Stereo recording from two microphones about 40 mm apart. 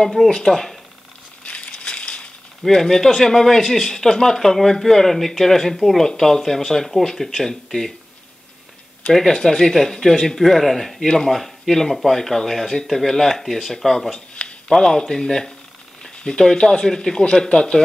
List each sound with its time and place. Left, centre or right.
0.1 s speech: centre
1.4 s crumpling: left
1.7 s crushing: left
2.6 s speech: centre
9.1 s speech: centre